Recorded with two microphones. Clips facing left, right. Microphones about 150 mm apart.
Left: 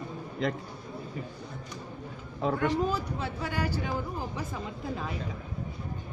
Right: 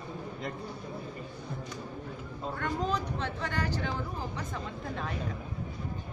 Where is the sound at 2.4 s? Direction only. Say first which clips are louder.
Left 9 dB; 90° left.